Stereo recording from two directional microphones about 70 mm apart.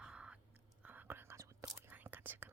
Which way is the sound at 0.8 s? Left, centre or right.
Right.